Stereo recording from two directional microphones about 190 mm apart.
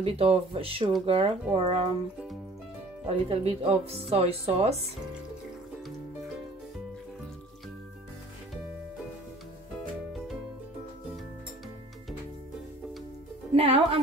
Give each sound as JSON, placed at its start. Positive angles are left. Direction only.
{"t": 0.0, "sound": "speech", "side_deg": -30}
{"t": 3.1, "sound": "speech", "side_deg": -30}
{"t": 13.6, "sound": "speech", "side_deg": -30}